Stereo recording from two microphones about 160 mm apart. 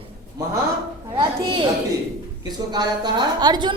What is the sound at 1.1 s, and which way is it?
Speech, 30° right (ahead or behind).